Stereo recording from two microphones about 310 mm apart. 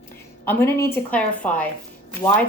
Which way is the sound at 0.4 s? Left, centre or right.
Centre.